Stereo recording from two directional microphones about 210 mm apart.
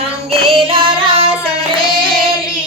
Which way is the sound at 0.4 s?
25° right (ahead or behind).